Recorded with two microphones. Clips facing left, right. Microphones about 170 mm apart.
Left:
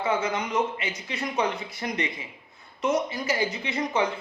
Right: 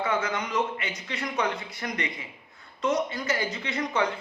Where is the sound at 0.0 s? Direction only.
20° left (ahead or behind).